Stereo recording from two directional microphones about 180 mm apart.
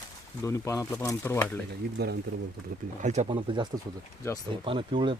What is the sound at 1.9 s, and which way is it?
Speech, 65° right (ahead or behind).